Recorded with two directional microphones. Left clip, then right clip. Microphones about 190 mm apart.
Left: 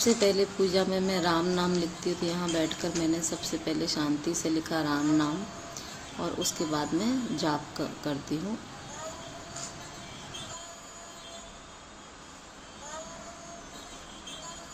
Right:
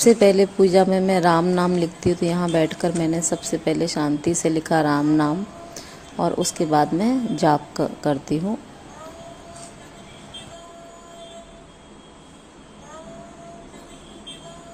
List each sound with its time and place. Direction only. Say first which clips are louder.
0.0 s speech: right 10 dB; 50° right (ahead or behind)